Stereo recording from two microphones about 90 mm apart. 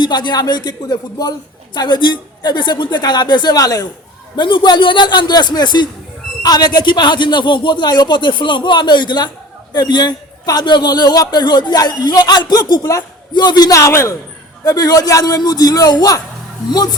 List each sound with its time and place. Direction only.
0.0 s a man's voice: 55° left (ahead or behind)
3.5 s speech: 40° left (ahead or behind)
4.4 s a man's voice: 60° left (ahead or behind)
13.7 s speech: 35° left (ahead or behind)
14.6 s a man's voice: 45° left (ahead or behind)